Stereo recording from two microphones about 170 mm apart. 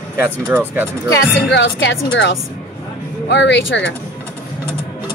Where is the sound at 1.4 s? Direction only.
90° left.